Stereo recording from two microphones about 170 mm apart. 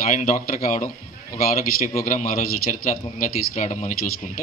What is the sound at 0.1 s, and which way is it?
A man's voice, 50° left (ahead or behind).